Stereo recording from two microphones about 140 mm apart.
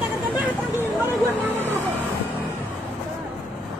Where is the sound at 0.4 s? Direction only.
15° right (ahead or behind).